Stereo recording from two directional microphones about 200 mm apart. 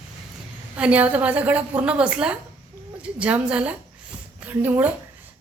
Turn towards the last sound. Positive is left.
turn(degrees=-10)  # may be behind; listen again after turning